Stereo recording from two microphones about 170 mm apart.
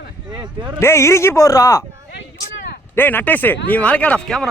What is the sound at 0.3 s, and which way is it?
Speech, 25° right (ahead or behind).